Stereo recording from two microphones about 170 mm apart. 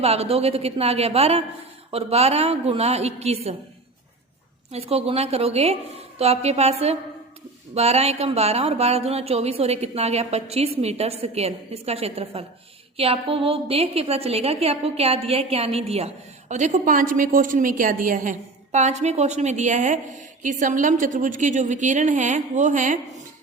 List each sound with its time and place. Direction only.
0.0 s a woman's voice: 35° right (ahead or behind)
4.7 s a woman's voice: 35° right (ahead or behind)